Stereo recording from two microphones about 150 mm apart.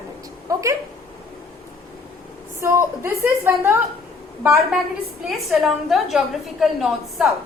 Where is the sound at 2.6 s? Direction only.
20° right (ahead or behind); by 7.3 s centre (ahead or behind).